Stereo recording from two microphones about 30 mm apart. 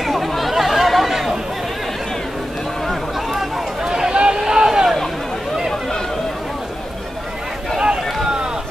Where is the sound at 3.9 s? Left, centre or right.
Right.